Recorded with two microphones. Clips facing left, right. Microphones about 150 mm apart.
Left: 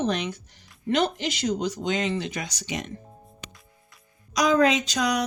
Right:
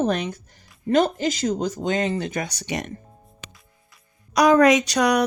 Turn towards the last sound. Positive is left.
turn(degrees=-65)  # may be behind; listen again after turning